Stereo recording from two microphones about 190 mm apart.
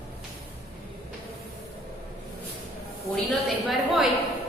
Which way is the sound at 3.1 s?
Centre (ahead or behind).